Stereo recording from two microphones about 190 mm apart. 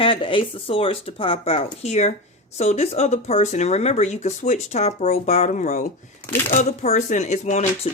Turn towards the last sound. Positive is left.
turn(degrees=35)  # may be behind; listen again after turning